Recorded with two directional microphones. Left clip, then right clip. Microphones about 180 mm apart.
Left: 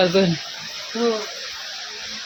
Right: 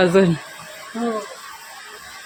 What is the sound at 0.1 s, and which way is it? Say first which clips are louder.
Speech: right 3 dB; 35° right (ahead or behind).